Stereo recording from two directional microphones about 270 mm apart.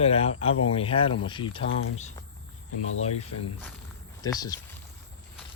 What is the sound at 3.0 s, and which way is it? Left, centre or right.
Speech, left.